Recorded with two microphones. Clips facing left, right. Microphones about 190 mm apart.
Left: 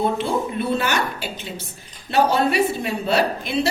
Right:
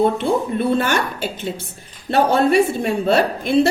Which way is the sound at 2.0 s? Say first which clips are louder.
Right 3 dB; 55° right (ahead or behind).